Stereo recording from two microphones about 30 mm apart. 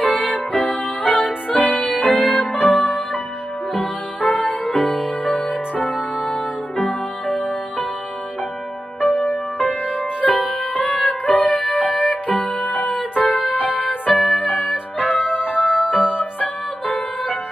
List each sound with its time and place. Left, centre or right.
0.0 s music: left
9.0 s music: left
11.4 s music: left
11.7 s music: left
14.3 s music: left